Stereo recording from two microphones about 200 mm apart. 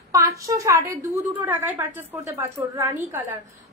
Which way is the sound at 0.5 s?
15° right (ahead or behind).